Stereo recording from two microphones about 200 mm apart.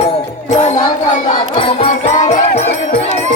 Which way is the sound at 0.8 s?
45° left (ahead or behind).